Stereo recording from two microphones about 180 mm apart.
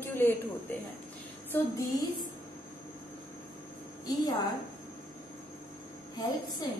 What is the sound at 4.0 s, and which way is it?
Speech, 20° left (ahead or behind).